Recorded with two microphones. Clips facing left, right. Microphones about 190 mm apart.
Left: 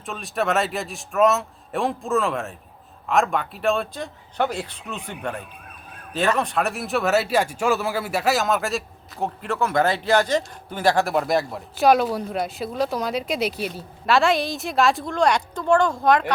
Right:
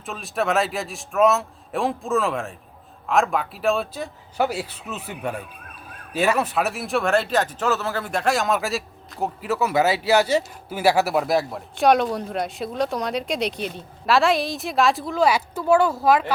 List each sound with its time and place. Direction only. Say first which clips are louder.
0.0 s speech: even; centre (ahead or behind)